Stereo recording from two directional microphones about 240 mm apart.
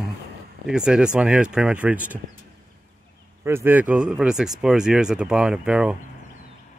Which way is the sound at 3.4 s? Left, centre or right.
Centre.